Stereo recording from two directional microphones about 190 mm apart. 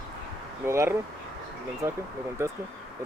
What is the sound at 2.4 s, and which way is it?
Speech, 15° right (ahead or behind).